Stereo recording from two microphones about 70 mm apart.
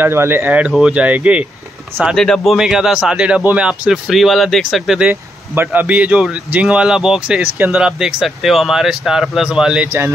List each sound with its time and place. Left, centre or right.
0.0 s speech: right
0.5 s a man's voice: centre
2.1 s speech: centre
4.1 s speech: centre
5.1 s speech: right
5.7 s a man's voice: right